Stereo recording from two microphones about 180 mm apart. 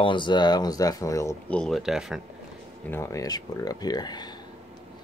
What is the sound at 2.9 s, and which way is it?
Speech, 15° left (ahead or behind).